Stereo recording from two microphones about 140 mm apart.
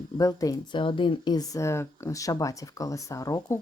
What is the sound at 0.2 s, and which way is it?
Speech, 25° left (ahead or behind).